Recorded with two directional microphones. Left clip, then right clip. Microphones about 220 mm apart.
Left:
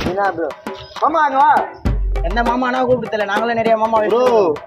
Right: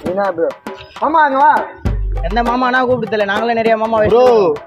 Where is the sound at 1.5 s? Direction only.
Centre (ahead or behind).